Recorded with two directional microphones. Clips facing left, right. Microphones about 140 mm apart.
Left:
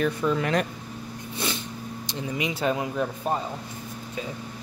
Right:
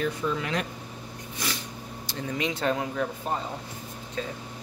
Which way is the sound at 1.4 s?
25° left (ahead or behind).